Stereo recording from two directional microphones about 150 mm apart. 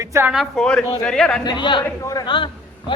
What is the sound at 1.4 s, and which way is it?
A man's voice, 30° left (ahead or behind).